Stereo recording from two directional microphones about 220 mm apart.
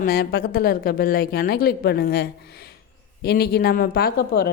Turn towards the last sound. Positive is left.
turn(degrees=45)  # may be behind; listen again after turning